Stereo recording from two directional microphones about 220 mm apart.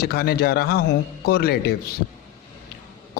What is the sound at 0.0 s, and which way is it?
A man's voice, 45° left (ahead or behind).